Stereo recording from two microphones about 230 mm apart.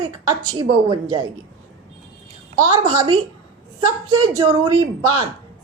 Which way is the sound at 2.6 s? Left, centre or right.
Centre.